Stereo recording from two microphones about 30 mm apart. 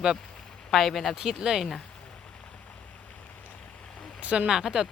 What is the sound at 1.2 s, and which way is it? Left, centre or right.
Speech, right.